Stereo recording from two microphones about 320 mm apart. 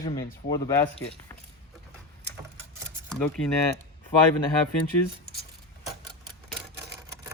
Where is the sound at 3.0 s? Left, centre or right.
Centre.